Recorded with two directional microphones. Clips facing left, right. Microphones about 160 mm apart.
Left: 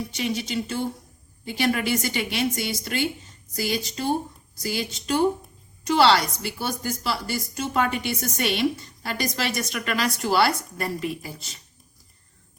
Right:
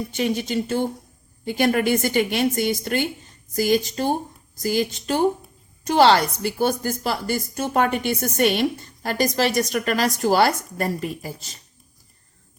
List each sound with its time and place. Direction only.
0.2 s a woman's voice: 45° right (ahead or behind)